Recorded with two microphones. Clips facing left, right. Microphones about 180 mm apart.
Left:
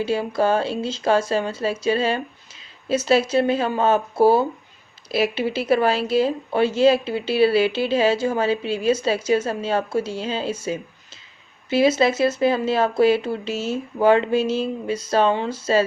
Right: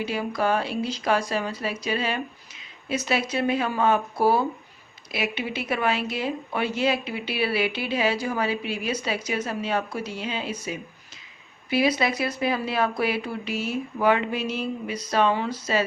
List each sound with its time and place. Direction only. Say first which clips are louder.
0.0 s speech: left 5 dB; 30° left (ahead or behind)